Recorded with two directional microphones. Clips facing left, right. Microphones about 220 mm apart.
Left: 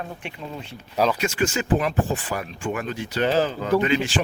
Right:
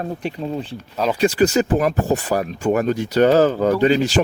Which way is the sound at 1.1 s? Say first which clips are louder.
Right 8 dB; 35° right (ahead or behind).